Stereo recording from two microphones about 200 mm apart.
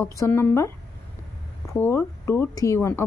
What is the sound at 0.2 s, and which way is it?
A woman's voice, 10° left (ahead or behind).